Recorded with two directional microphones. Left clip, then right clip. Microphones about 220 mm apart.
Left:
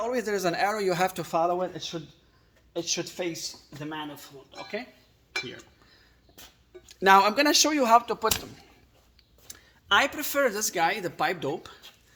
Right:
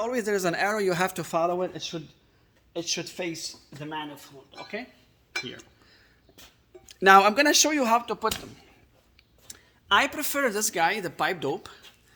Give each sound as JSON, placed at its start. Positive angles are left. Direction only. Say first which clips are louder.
{"t": 0.0, "sound": "speech", "louder": "right 1 dB", "side_deg": -25}
{"t": 3.8, "sound": "speech", "louder": "right 1 dB", "side_deg": 0}
{"t": 5.5, "sound": "a sound", "louder": "right 1 dB", "side_deg": -20}
{"t": 6.8, "sound": "speech", "louder": "right 2 dB", "side_deg": -20}
{"t": 9.5, "sound": "speech", "louder": "right 1 dB", "side_deg": -15}